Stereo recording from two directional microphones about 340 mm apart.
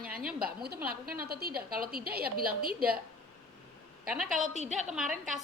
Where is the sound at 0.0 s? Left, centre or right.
Right.